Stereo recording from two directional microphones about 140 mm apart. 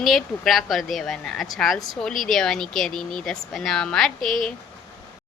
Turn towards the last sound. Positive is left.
turn(degrees=0)  # may be behind; listen again after turning